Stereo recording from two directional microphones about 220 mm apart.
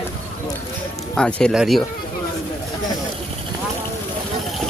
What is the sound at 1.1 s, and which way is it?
Speech, 5° left (ahead or behind).